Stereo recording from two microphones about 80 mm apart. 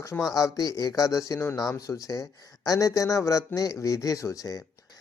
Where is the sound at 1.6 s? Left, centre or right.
Left.